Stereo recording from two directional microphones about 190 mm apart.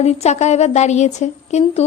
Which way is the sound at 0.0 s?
35° left (ahead or behind).